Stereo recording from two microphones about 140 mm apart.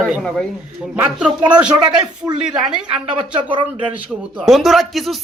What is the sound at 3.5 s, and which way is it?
Speech, 35° right (ahead or behind).